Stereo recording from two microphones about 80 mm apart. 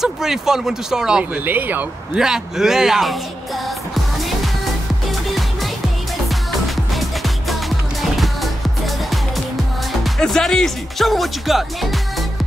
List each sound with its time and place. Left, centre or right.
0.0 s speech: centre
1.3 s speech: right
2.1 s speech: centre
5.0 s music: centre
10.0 s speech: centre